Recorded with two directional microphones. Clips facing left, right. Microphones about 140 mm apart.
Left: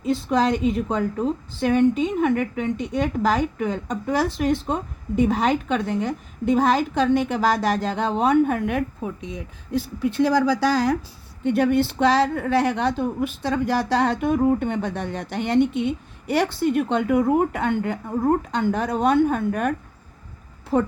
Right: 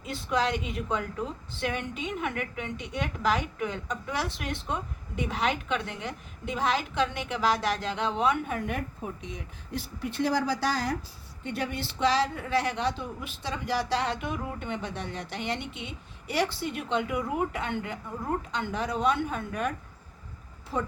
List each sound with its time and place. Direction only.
0.0 s a woman's voice: 35° left (ahead or behind)
8.5 s a woman's voice: 75° left (ahead or behind)
10.1 s speech: 90° left
11.4 s a woman's voice: 55° left (ahead or behind)
20.7 s a woman's voice: 60° left (ahead or behind)